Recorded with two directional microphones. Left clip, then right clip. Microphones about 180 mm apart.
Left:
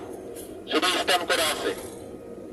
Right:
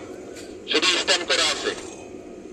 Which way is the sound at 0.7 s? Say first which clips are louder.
Right 3 dB; 80° left.